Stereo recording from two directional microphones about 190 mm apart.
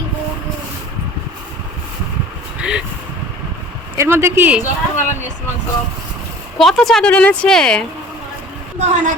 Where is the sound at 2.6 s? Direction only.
5° right (ahead or behind).